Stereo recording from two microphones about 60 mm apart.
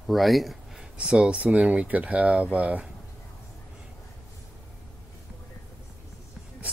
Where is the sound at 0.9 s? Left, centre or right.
Centre.